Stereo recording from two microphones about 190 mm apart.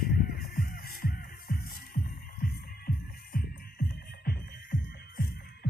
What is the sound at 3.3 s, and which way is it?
Music, 50° left (ahead or behind).